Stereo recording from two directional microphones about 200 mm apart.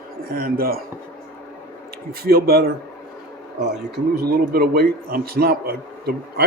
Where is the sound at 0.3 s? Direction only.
45° right (ahead or behind).